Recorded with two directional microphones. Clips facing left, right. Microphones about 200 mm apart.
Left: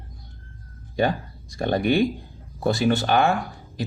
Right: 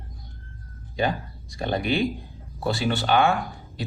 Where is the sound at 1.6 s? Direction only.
50° left (ahead or behind).